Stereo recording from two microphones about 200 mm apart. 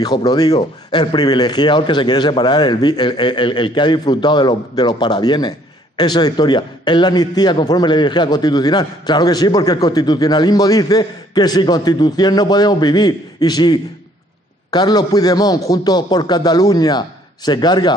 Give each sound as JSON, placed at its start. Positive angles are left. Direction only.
{"t": 0.0, "sound": "a man's voice", "side_deg": 20}